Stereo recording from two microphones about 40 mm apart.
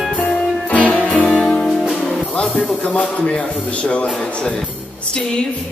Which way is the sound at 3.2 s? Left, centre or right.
Left.